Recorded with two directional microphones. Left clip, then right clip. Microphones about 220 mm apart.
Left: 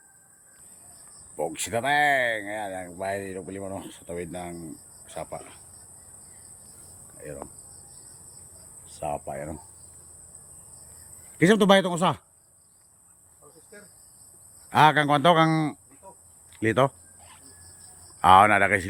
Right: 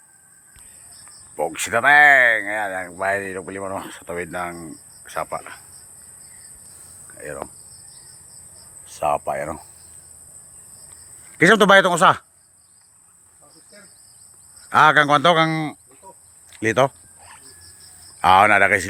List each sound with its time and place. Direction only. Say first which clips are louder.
1.4 s speech: right 8 dB; 5° left (ahead or behind)
9.0 s speech: right 10 dB; 35° right (ahead or behind)
11.3 s speech: right 7 dB; centre (ahead or behind)
14.7 s speech: right 6 dB; 5° left (ahead or behind)
16.5 s a sound: right 5 dB; 10° left (ahead or behind)
18.2 s speech: right 3 dB; 15° left (ahead or behind)